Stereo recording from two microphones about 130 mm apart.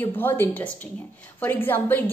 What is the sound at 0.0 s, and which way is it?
A woman's voice, 15° left (ahead or behind).